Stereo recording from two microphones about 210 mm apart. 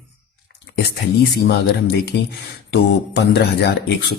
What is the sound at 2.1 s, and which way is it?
Speech, 55° left (ahead or behind).